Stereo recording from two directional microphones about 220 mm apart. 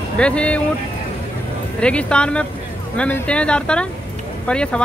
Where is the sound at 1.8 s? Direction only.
5° left (ahead or behind).